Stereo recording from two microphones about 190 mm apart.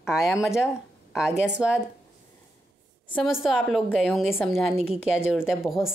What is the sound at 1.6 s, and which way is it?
Speech, 5° right (ahead or behind).